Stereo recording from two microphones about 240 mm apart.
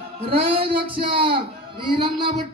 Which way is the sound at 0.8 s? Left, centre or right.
Right.